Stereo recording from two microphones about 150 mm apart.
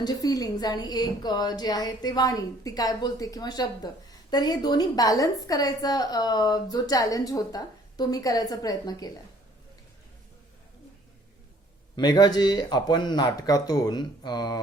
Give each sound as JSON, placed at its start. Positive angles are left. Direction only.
{"t": 0.0, "sound": "a woman's voice", "side_deg": 25}
{"t": 11.9, "sound": "a woman's voice", "side_deg": 30}